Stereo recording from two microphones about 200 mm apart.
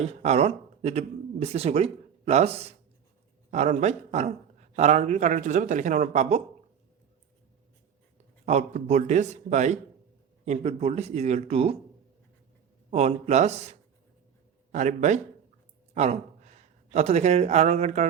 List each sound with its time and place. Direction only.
0.0 s speech: 30° right (ahead or behind)
8.4 s speech: 35° right (ahead or behind)
12.9 s speech: 35° right (ahead or behind)